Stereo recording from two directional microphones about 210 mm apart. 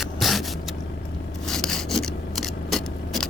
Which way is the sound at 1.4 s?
Centre (ahead or behind).